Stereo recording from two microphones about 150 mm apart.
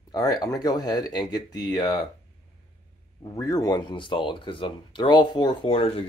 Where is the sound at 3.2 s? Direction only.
25° left (ahead or behind).